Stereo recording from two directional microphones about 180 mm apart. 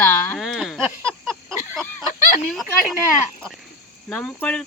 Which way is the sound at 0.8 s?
15° right (ahead or behind).